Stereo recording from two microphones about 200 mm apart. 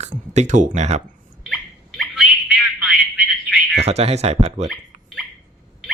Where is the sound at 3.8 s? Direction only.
30° right (ahead or behind).